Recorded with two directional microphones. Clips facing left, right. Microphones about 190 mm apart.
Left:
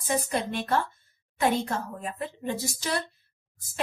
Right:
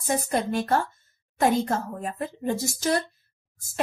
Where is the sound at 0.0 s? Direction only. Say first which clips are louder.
Right 2 dB; 45° right (ahead or behind).